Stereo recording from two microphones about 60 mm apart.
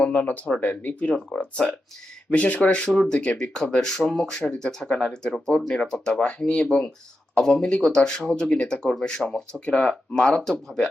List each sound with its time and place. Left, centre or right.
0.0 s speech: left